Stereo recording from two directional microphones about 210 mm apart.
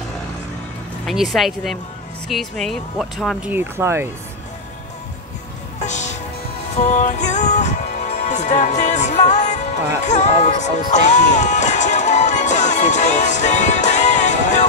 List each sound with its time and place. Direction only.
1.0 s speech: centre (ahead or behind)
5.9 s music: 35° left (ahead or behind)